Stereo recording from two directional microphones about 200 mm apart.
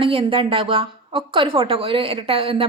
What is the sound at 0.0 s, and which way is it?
A woman's voice, 25° right (ahead or behind).